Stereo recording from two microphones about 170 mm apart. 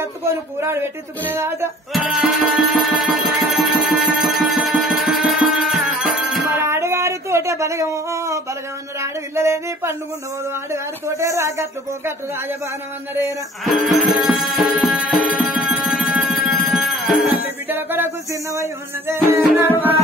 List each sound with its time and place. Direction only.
0.6 s music: 15° right (ahead or behind)
2.0 s music: centre (ahead or behind)
6.6 s a sound: 15° right (ahead or behind)
10.7 s music: 15° right (ahead or behind)
13.9 s tabla: centre (ahead or behind)
17.6 s music: 10° right (ahead or behind)